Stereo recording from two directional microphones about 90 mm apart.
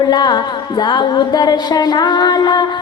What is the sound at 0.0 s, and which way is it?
Music, 55° left (ahead or behind).